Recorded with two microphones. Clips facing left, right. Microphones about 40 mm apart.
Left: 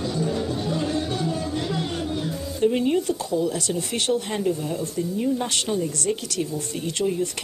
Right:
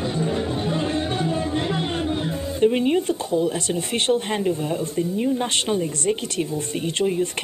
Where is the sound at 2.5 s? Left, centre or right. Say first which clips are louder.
Right 2 dB; right.